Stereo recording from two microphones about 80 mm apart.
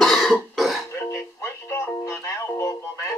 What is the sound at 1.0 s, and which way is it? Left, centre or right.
Music, left.